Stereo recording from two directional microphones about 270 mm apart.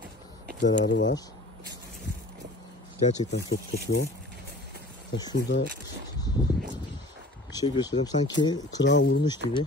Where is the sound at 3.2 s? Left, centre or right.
Left.